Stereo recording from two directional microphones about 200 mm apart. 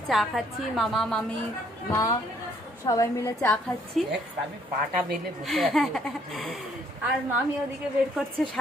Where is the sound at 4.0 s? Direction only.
Centre (ahead or behind).